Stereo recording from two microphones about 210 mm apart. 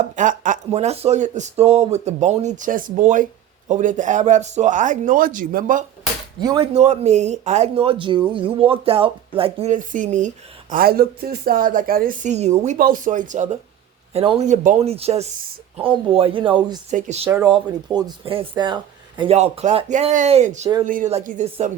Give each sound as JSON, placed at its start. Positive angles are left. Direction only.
{"t": 0.0, "sound": "speech", "side_deg": -35}
{"t": 6.4, "sound": "speech", "side_deg": -20}
{"t": 6.7, "sound": "speech", "side_deg": -30}
{"t": 17.2, "sound": "speech", "side_deg": -10}
{"t": 17.9, "sound": "speech", "side_deg": -20}